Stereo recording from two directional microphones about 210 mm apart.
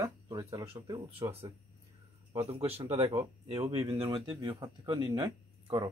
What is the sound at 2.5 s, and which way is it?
Speech, 25° right (ahead or behind).